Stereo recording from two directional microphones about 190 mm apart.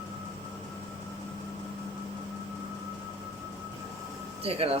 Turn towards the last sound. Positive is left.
turn(degrees=-30)  # may be behind; listen again after turning